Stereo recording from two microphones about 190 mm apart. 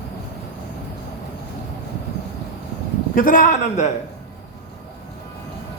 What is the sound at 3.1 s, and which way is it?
Speech, 45° left (ahead or behind).